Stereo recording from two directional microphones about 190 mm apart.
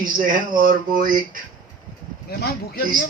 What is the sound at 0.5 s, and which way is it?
Speech, 45° right (ahead or behind).